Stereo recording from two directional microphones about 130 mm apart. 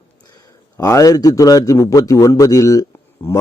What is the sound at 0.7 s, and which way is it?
A man's voice, 25° left (ahead or behind).